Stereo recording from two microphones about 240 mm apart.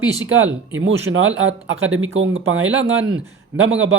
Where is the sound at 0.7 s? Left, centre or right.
Right.